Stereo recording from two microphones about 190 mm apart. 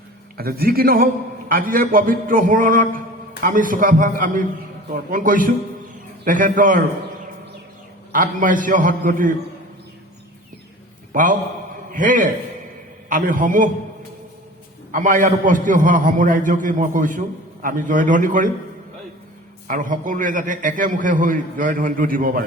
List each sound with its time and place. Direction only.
0.3 s a man's voice: 50° right (ahead or behind)
8.1 s a man's voice: 45° right (ahead or behind)
11.1 s a man's voice: 45° right (ahead or behind)
14.9 s a man's voice: 45° right (ahead or behind)
19.6 s a man's voice: 45° right (ahead or behind)